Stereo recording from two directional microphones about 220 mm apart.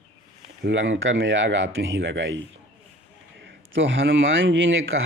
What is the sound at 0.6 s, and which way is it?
Speech, 60° right (ahead or behind).